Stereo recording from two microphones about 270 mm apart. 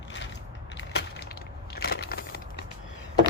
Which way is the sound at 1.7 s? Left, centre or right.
Left.